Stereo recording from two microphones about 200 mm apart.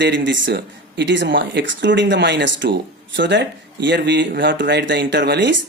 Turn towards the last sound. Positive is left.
turn(degrees=-60)  # may be behind; listen again after turning